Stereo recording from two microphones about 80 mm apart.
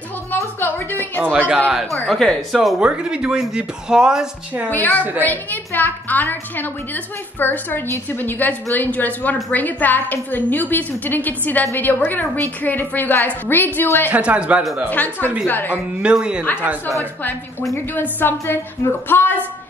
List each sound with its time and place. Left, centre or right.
0.6 s a woman's voice: left
1.2 s speech: centre
2.0 s speech: centre
2.8 s speech: centre
4.6 s a woman's voice: left
14.1 s speech: centre
14.9 s a woman's voice: left
15.7 s speech: centre
17.0 s a woman's voice: left